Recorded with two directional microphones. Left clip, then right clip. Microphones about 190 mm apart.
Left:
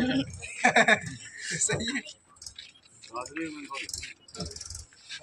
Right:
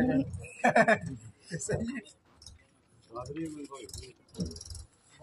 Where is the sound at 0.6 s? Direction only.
45° right (ahead or behind).